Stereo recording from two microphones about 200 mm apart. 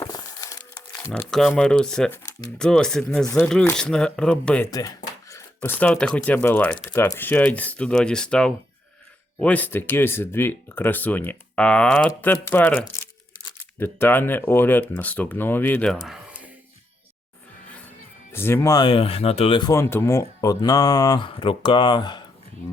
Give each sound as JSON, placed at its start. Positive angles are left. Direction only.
{"t": 0.0, "sound": "crumpling", "side_deg": 20}
{"t": 0.9, "sound": "speech", "side_deg": 10}
{"t": 4.7, "sound": "speech", "side_deg": 20}
{"t": 18.3, "sound": "speech", "side_deg": 10}